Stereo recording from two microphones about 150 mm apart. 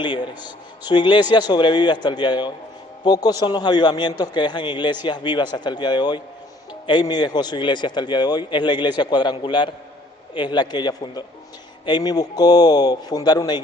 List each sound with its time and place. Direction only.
0.0 s a man's voice: 30° left (ahead or behind)